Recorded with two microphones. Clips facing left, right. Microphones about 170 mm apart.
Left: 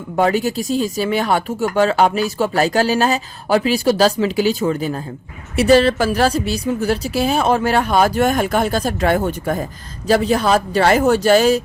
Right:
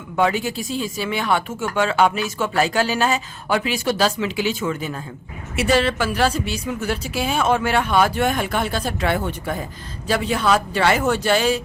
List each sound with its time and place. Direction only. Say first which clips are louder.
0.2 s a woman's voice: left 4 dB; 40° left (ahead or behind)